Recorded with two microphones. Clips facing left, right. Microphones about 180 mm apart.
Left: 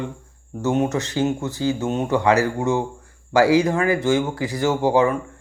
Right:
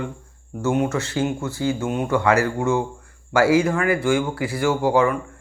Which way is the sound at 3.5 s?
35° left (ahead or behind).